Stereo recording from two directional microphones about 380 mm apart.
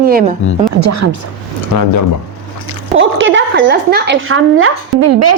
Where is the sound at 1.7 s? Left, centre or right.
Left.